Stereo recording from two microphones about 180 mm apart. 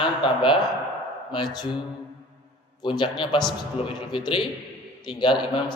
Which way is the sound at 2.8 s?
25° left (ahead or behind).